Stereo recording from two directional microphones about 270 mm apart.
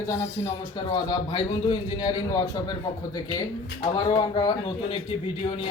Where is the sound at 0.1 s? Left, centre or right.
Centre.